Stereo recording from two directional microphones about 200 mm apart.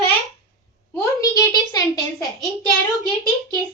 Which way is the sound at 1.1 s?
15° left (ahead or behind).